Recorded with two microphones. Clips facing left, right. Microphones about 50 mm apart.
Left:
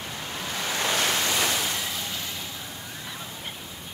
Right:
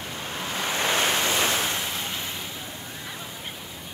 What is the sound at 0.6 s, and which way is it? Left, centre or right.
Waves, right.